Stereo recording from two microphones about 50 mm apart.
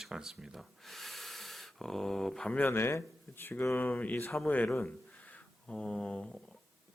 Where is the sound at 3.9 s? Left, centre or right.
Left.